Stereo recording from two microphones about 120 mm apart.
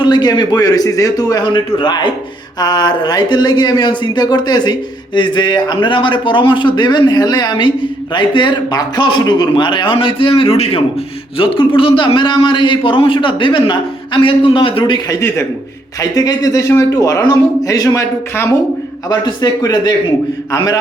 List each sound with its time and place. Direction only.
0.0 s a man's voice: 35° left (ahead or behind)